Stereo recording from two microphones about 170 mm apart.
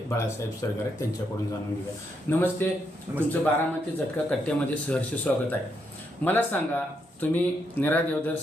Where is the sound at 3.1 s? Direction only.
10° right (ahead or behind).